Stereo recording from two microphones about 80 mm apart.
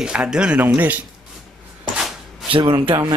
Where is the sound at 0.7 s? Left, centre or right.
Right.